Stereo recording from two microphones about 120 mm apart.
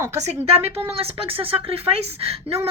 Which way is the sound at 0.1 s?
65° right (ahead or behind).